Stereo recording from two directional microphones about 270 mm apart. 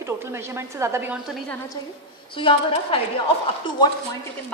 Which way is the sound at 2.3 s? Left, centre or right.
Centre.